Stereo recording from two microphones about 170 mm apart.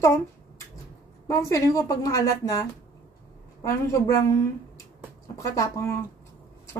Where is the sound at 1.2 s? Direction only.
20° left (ahead or behind).